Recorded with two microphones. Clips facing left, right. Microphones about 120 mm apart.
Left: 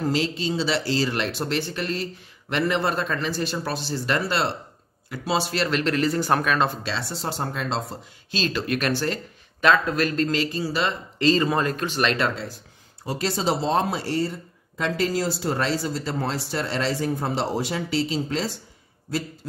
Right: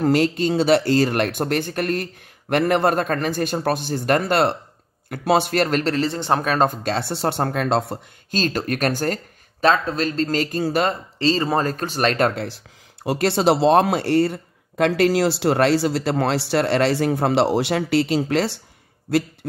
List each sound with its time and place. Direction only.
0.0 s speech: 55° right (ahead or behind)
9.7 s speech: 30° right (ahead or behind); by 11.0 s 50° right (ahead or behind)
11.1 s speech: 30° right (ahead or behind); by 12.4 s 50° right (ahead or behind)
12.4 s speech: 75° right (ahead or behind)